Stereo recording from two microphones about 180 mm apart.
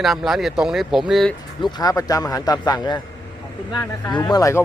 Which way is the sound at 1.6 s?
20° left (ahead or behind).